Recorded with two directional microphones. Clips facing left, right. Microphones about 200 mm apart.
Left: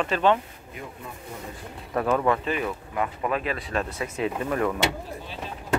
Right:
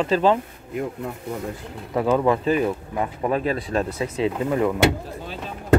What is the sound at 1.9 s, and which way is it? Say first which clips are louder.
Speech: right 4 dB; 15° right (ahead or behind).